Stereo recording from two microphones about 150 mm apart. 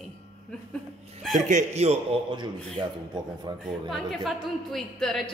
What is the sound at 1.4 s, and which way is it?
Speech, 50° right (ahead or behind).